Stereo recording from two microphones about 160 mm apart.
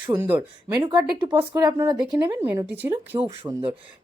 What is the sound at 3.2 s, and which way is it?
Speech, 30° right (ahead or behind).